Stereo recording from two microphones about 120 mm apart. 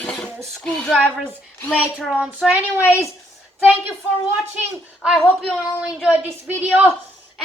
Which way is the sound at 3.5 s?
15° right (ahead or behind).